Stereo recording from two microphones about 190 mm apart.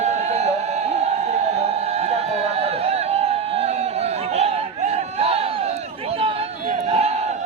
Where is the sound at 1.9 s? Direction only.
35° right (ahead or behind).